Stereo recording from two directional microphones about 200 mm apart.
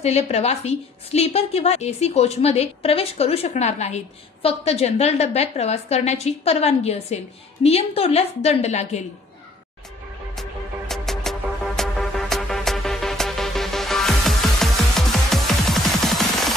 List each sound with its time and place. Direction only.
0.0 s a woman's voice: 30° left (ahead or behind)
10.9 s music: centre (ahead or behind)